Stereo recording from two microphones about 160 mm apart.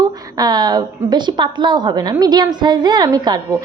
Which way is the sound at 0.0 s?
25° right (ahead or behind).